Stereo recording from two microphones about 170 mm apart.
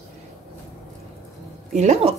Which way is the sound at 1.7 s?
40° right (ahead or behind).